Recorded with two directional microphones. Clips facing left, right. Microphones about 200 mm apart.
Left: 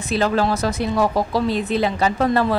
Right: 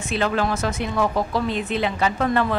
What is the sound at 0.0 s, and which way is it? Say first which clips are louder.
Speech: left 3 dB; 35° left (ahead or behind).